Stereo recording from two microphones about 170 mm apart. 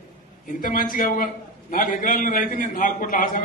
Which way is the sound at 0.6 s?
55° left (ahead or behind).